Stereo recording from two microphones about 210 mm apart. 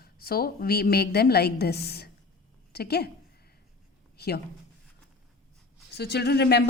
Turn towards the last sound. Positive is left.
turn(degrees=50)  # may be behind; listen again after turning